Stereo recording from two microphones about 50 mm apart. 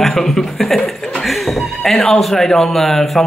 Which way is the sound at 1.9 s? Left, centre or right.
Centre.